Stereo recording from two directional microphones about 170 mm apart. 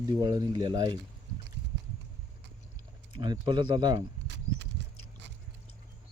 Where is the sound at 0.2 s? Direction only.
20° right (ahead or behind).